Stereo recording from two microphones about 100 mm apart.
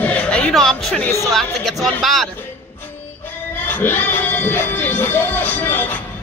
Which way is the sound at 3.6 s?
20° left (ahead or behind).